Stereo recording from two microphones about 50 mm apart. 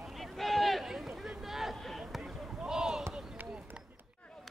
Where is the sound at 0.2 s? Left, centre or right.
Centre.